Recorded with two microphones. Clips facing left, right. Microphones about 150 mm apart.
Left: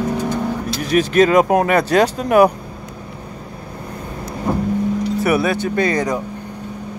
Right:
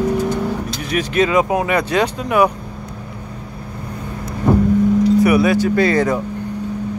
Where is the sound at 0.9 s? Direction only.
40° left (ahead or behind).